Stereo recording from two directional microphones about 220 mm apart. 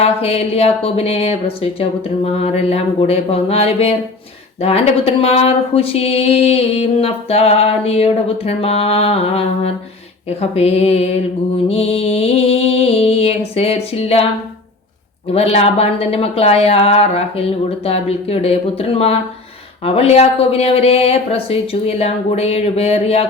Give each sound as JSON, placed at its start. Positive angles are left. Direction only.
{"t": 0.0, "sound": "speech", "side_deg": 25}
{"t": 15.3, "sound": "speech", "side_deg": 25}